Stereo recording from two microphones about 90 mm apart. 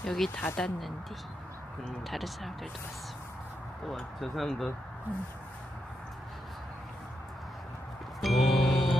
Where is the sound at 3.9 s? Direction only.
Centre (ahead or behind).